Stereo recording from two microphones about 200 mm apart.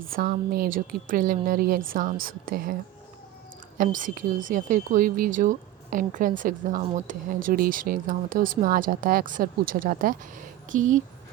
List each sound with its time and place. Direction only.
0.2 s speech: 45° right (ahead or behind)
3.9 s speech: 40° right (ahead or behind)